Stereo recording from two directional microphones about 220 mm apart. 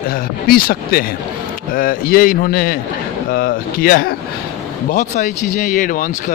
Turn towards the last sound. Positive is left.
turn(degrees=35)  # may be behind; listen again after turning